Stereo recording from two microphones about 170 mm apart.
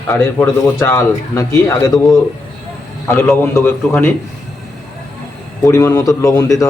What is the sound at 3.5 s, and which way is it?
Speech, 15° left (ahead or behind).